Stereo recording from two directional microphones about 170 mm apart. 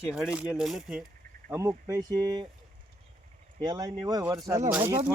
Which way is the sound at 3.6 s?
25° right (ahead or behind).